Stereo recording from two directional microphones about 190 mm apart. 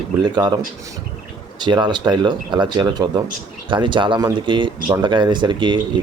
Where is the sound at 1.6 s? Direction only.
25° right (ahead or behind).